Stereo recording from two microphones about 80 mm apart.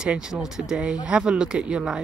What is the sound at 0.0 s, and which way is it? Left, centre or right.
Speech, centre.